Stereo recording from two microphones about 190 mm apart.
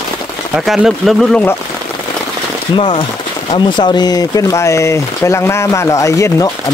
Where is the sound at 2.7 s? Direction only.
25° left (ahead or behind).